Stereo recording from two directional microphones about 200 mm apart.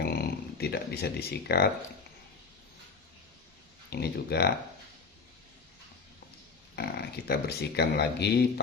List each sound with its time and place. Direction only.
0.0 s a sound: 50° left (ahead or behind)
3.8 s speech: 55° left (ahead or behind)
6.7 s speech: 55° left (ahead or behind)